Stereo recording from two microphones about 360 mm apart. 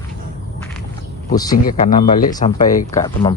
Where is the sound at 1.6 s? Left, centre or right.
Left.